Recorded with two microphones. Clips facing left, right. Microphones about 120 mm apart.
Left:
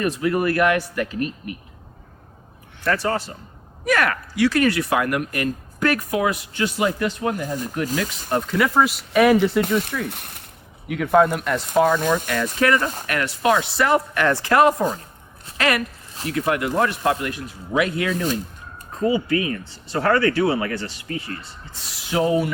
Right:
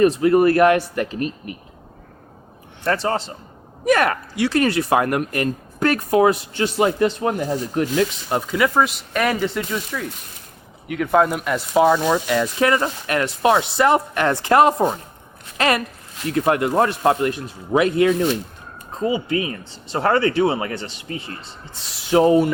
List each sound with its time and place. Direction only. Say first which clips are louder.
0.0 s speech: right 7 dB; 30° right (ahead or behind)
2.8 s speech: right 1 dB; 25° right (ahead or behind)
7.9 s speech: right 5 dB; 40° left (ahead or behind)
8.5 s speech: right 1 dB; centre (ahead or behind)
10.1 s speech: left 2 dB; 60° left (ahead or behind)
10.8 s speech: left 1 dB; centre (ahead or behind); by 18.3 s 30° right (ahead or behind)
18.9 s speech: left 1 dB; 20° right (ahead or behind)